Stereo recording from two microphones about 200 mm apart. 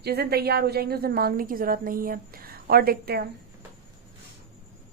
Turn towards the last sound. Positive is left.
turn(degrees=-50)  # may be behind; listen again after turning